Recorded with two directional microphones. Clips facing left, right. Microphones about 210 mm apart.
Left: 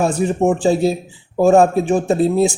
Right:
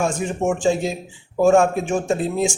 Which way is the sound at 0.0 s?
35° left (ahead or behind).